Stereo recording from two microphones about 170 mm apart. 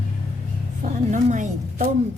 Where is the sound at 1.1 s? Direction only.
45° right (ahead or behind).